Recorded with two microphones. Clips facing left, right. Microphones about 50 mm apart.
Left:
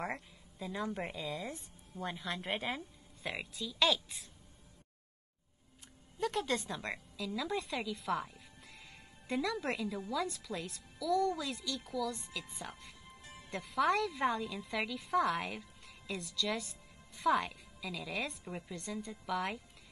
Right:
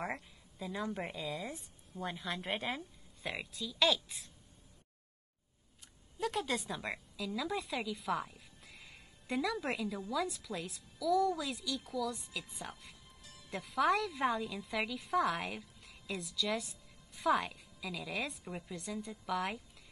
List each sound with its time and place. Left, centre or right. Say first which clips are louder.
0.0 s speech: even; centre
6.1 s a woman's voice: left 1 dB; centre
13.2 s music: left 6 dB; left
13.5 s speech: even; centre